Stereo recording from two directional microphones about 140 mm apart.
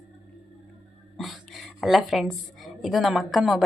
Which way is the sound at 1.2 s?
Centre (ahead or behind).